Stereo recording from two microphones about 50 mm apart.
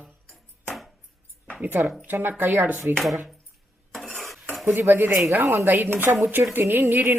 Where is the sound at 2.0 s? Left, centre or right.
Right.